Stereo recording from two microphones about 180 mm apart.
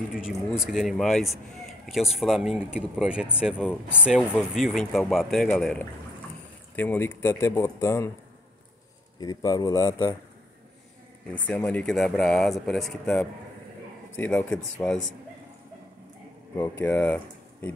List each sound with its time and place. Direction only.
0.1 s speech: centre (ahead or behind); by 8.1 s 15° left (ahead or behind)
9.2 s speech: 20° left (ahead or behind)
11.3 s speech: 5° left (ahead or behind)
16.5 s speech: 10° left (ahead or behind)